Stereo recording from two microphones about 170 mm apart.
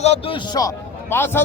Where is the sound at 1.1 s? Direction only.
15° left (ahead or behind).